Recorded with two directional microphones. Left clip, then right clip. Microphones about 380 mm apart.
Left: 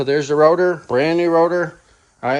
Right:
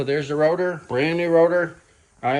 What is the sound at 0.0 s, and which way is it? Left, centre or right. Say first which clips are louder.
Speech: left 6 dB; centre.